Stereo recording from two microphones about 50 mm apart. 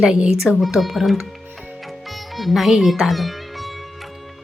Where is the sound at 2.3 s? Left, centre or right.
Centre.